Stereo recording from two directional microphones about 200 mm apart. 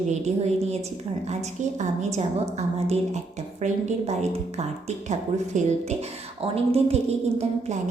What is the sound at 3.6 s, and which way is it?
A woman's voice, 35° right (ahead or behind).